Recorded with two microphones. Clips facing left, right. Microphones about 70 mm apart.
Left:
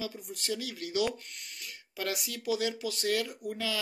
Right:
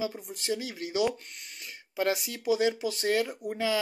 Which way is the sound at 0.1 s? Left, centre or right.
Right.